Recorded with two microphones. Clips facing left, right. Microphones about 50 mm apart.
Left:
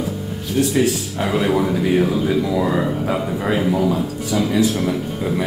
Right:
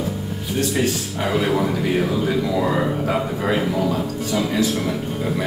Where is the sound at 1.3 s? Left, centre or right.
Centre.